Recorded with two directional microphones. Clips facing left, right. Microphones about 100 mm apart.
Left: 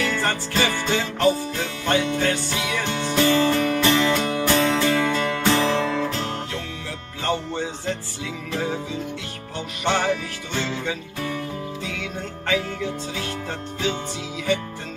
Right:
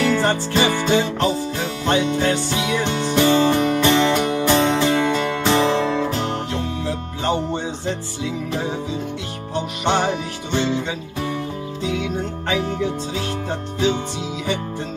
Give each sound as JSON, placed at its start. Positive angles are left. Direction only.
{"t": 0.2, "sound": "music", "side_deg": -20}
{"t": 9.8, "sound": "music", "side_deg": -20}